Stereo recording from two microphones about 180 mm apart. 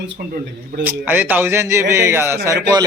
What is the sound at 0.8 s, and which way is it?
A man's voice, 10° right (ahead or behind).